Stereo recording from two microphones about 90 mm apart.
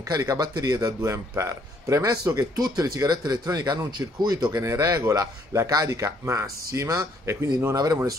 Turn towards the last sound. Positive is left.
turn(degrees=-45)  # may be behind; listen again after turning